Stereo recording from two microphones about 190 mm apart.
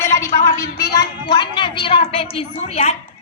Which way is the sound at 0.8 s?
20° left (ahead or behind).